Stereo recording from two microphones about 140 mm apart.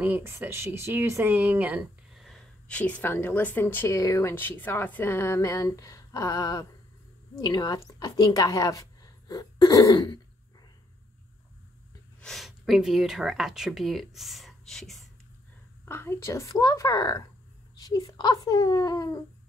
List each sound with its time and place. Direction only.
0.0 s speech: 15° right (ahead or behind)
2.2 s speech: 10° left (ahead or behind); by 10.1 s 25° left (ahead or behind)
12.2 s speech: centre (ahead or behind)
15.8 s speech: 15° left (ahead or behind)